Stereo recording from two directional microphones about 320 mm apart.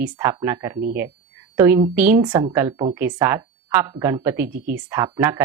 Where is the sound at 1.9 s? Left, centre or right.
Centre.